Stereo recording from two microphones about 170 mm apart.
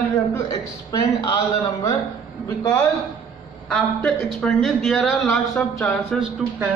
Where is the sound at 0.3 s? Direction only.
20° left (ahead or behind).